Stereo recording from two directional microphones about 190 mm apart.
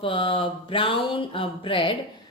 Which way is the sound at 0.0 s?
25° left (ahead or behind).